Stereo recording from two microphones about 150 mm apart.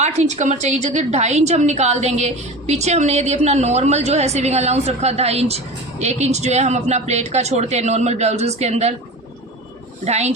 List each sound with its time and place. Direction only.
0.0 s a woman's voice: 50° right (ahead or behind)
10.0 s a woman's voice: 45° right (ahead or behind)